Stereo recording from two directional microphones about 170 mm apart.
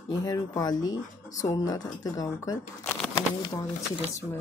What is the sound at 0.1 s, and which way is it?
Speech, 20° left (ahead or behind).